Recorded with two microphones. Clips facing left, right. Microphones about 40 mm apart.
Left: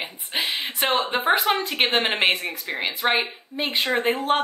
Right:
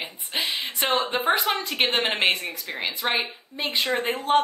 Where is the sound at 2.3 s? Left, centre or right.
Left.